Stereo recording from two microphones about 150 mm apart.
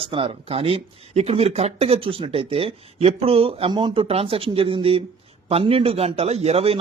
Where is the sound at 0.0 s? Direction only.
35° right (ahead or behind).